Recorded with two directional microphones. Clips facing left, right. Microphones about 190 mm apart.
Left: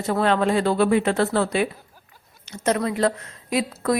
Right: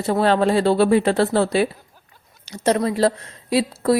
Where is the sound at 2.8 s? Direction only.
35° right (ahead or behind).